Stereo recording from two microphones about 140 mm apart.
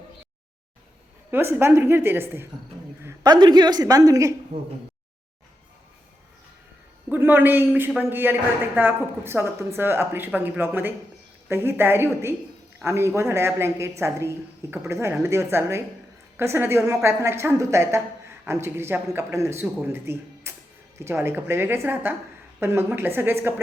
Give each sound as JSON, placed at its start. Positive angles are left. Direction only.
{"t": 1.3, "sound": "a woman's voice", "side_deg": -15}
{"t": 3.2, "sound": "a woman's voice", "side_deg": -30}
{"t": 7.1, "sound": "a woman's voice", "side_deg": -15}